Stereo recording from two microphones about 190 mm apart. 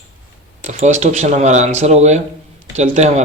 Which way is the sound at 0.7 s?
35° right (ahead or behind).